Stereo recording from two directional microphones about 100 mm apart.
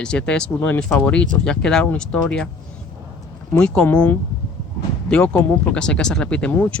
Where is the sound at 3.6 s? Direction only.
10° left (ahead or behind).